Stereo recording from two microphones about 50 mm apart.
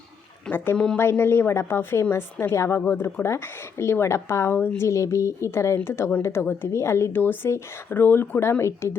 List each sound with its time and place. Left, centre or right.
0.5 s a woman's voice: left
2.8 s a woman's voice: left
4.8 s speech: left
6.7 s speech: left
7.1 s speech: left